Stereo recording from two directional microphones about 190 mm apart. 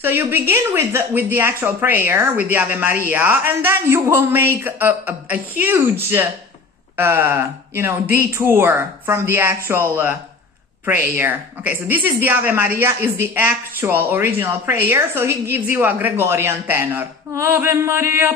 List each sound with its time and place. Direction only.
0.0 s a woman's voice: 10° right (ahead or behind)